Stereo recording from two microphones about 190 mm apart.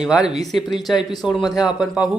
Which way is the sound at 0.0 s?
5° right (ahead or behind).